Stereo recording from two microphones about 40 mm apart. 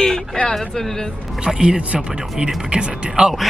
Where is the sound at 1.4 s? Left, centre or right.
Centre.